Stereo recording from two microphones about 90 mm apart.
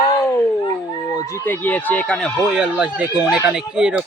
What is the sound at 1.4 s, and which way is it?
Speech, 20° left (ahead or behind).